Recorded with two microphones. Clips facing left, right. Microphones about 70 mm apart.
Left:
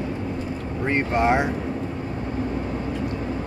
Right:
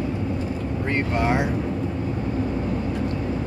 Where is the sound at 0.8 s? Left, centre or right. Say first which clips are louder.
Left 3 dB; left.